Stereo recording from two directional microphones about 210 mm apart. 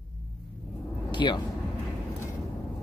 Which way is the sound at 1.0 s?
20° left (ahead or behind).